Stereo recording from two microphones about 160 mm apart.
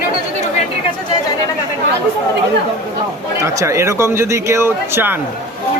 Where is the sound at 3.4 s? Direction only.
20° right (ahead or behind).